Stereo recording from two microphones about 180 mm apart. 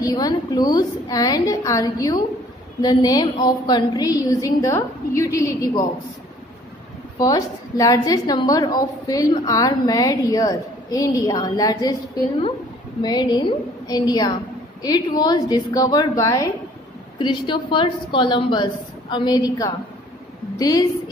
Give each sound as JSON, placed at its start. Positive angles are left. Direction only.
{"t": 0.0, "sound": "a woman's voice", "side_deg": 20}
{"t": 7.2, "sound": "a woman's voice", "side_deg": 20}
{"t": 20.5, "sound": "a woman's voice", "side_deg": 20}